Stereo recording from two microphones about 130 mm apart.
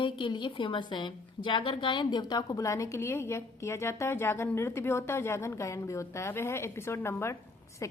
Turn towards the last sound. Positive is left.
turn(degrees=25)  # may be behind; listen again after turning